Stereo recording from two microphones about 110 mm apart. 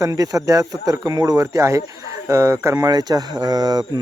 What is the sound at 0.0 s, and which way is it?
Speech, 30° right (ahead or behind).